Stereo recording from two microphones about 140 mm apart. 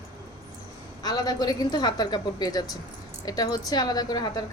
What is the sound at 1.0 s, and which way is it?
Speech, 30° left (ahead or behind).